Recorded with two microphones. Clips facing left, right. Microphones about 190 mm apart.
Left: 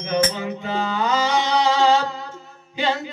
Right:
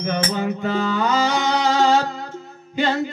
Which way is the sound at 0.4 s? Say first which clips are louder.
Right 4 dB; 50° right (ahead or behind).